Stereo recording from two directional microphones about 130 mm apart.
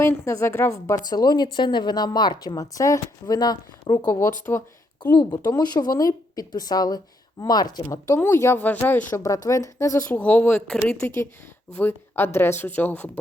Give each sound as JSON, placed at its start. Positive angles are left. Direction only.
{"t": 0.0, "sound": "speech", "side_deg": 20}
{"t": 5.1, "sound": "speech", "side_deg": 30}
{"t": 9.2, "sound": "speech", "side_deg": 25}
{"t": 10.1, "sound": "speech", "side_deg": 10}